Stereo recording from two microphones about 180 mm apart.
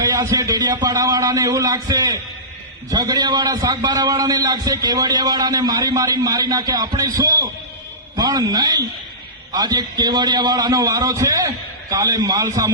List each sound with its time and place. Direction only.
0.0 s a man's voice: 20° right (ahead or behind)